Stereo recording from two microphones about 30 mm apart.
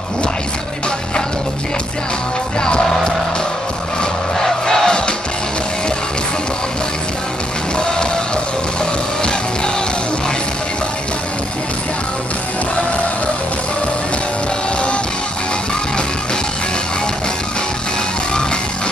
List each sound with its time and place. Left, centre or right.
2.6 s music: left
4.6 s battle cry: left
7.7 s music: left